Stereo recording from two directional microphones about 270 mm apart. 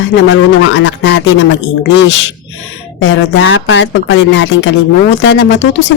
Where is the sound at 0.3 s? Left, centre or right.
Left.